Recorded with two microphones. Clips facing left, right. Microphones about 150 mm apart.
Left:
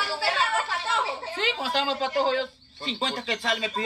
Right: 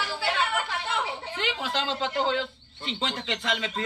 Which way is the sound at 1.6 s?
20° right (ahead or behind).